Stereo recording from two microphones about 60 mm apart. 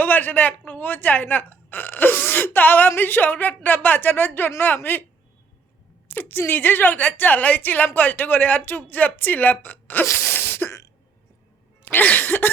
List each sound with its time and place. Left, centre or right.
0.0 s a sound: left
0.7 s speech: left
6.1 s speech: left
10.1 s sneeze: left
11.9 s throat clearing: left